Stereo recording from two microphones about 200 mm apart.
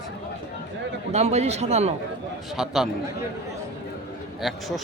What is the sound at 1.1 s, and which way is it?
Speech, 35° right (ahead or behind).